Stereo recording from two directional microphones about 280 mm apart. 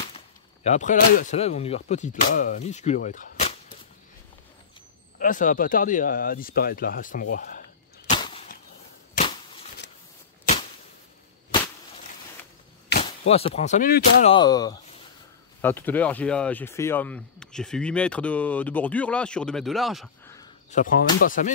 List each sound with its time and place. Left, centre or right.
0.7 s speech: left
5.2 s speech: left
8.1 s a sound: left
12.9 s whip: left
13.3 s speech: left
14.3 s speech: centre
20.7 s speech: left